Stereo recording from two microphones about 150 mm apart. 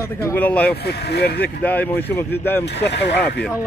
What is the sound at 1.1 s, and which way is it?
Speech, 90° left.